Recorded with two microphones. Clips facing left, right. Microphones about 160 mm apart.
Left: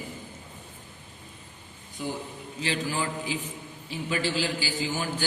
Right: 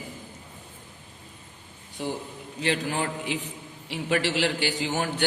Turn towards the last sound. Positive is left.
turn(degrees=-70)  # may be behind; listen again after turning